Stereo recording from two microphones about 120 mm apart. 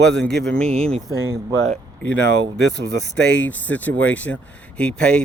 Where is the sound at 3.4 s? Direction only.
15° left (ahead or behind).